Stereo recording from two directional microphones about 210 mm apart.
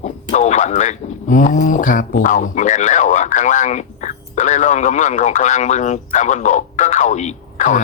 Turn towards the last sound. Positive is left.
turn(degrees=35)  # may be behind; listen again after turning